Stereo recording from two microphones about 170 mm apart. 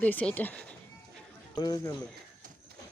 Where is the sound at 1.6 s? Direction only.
20° left (ahead or behind).